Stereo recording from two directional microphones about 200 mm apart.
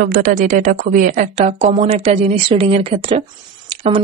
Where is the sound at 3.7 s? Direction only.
30° right (ahead or behind).